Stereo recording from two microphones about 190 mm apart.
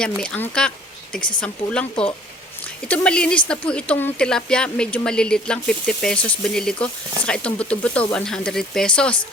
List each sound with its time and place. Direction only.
0.0 s a woman's voice: 5° left (ahead or behind)